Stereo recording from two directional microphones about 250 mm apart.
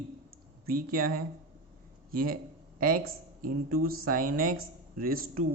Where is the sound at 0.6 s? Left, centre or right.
Right.